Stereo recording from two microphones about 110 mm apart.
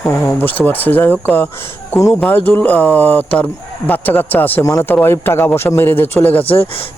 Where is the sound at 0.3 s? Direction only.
20° left (ahead or behind).